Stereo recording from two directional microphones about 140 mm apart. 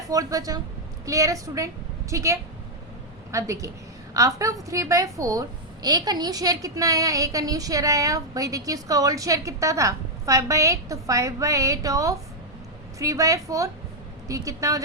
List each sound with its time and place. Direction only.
0.1 s a woman's voice: 25° right (ahead or behind)